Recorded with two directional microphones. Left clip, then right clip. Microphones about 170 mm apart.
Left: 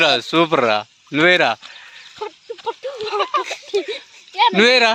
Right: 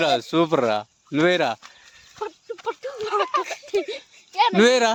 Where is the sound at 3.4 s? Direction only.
45° right (ahead or behind).